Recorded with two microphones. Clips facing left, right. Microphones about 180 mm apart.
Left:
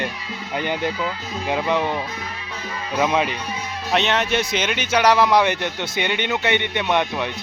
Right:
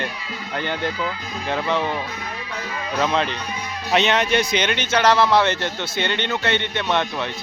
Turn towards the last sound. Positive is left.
turn(degrees=15)  # may be behind; listen again after turning